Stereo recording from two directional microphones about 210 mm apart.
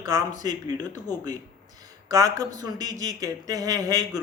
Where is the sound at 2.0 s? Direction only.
15° right (ahead or behind).